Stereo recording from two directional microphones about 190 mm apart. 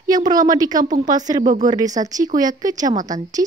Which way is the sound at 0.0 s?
20° right (ahead or behind).